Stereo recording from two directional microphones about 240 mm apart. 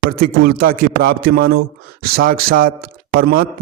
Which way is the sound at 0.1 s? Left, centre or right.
Right.